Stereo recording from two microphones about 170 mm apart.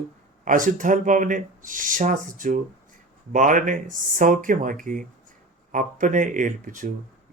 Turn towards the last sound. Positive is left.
turn(degrees=-50)  # may be behind; listen again after turning